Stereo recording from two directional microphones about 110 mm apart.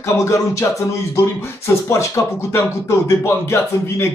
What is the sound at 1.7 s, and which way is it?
A man's voice, 25° left (ahead or behind).